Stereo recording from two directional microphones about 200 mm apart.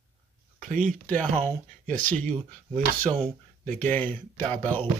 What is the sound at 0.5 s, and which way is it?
Speech, 40° right (ahead or behind).